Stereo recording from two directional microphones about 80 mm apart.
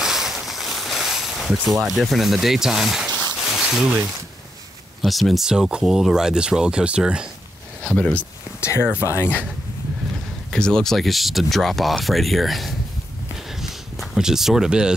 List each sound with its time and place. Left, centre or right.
0.0 s boat: centre
3.3 s a sound: centre
5.0 s speech: centre
7.8 s speech: centre
8.5 s speech: left
10.5 s speech: centre
13.6 s a sound: centre